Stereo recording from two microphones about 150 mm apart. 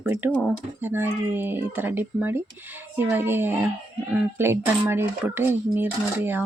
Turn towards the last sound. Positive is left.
turn(degrees=-15)  # may be behind; listen again after turning